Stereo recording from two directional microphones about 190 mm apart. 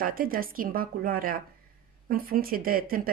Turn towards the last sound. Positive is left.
turn(degrees=-50)  # may be behind; listen again after turning